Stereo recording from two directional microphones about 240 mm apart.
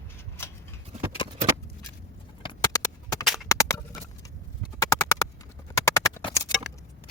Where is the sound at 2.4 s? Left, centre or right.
Centre.